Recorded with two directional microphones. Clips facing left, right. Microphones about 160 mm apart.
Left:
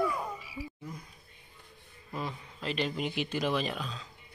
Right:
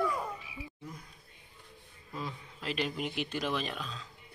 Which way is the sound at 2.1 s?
60° left (ahead or behind).